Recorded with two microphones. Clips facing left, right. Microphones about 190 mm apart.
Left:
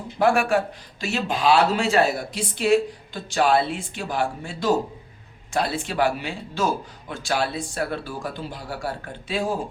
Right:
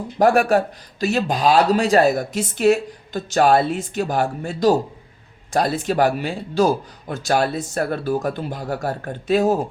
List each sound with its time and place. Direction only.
0.2 s a man's voice: 40° right (ahead or behind)